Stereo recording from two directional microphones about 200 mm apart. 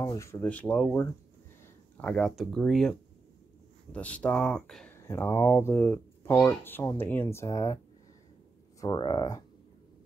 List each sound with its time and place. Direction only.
0.0 s speech: 15° left (ahead or behind)
8.8 s speech: 20° left (ahead or behind)